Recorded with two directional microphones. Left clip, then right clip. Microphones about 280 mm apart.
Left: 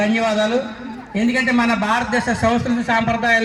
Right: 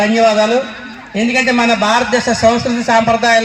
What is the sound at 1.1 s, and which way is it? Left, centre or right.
A man's voice, right.